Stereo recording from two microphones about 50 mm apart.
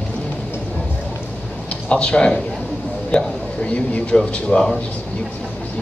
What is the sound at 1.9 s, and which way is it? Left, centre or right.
A man's voice, left.